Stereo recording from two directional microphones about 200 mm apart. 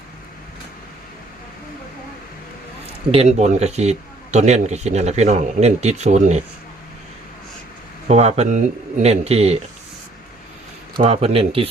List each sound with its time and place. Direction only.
3.1 s speech: 30° right (ahead or behind)
8.0 s speech: 30° right (ahead or behind)
10.9 s speech: 30° right (ahead or behind)